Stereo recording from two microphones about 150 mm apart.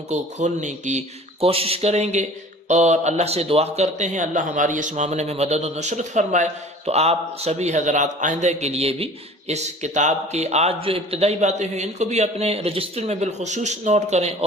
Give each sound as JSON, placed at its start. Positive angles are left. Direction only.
{"t": 0.1, "sound": "a man's voice", "side_deg": -50}